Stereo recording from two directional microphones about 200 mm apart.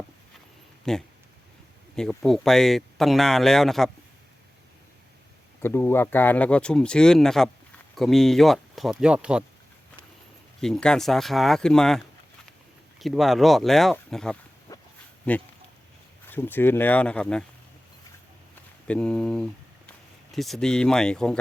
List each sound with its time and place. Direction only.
0.9 s speech: centre (ahead or behind)
5.6 s speech: 10° left (ahead or behind); by 9.4 s 5° right (ahead or behind)
10.6 s speech: 5° left (ahead or behind)
14.7 s a sound: 15° left (ahead or behind)
15.3 s speech: 5° left (ahead or behind)
18.9 s speech: 5° left (ahead or behind)